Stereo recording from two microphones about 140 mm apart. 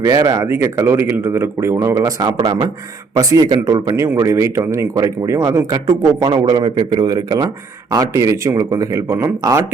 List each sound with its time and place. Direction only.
0.0 s speech: 25° right (ahead or behind)